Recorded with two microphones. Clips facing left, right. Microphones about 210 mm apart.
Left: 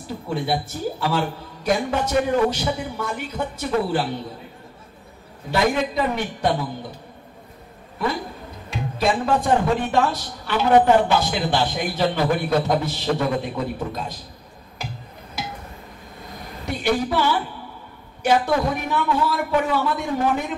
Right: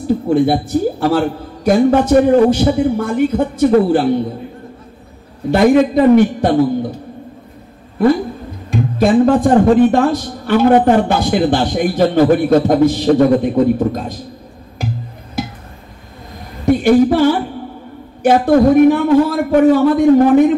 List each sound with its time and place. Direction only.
0.3 s a man's voice: 50° right (ahead or behind)
5.5 s a man's voice: 50° right (ahead or behind)
8.6 s a man's voice: 50° right (ahead or behind)
16.6 s a man's voice: 50° right (ahead or behind)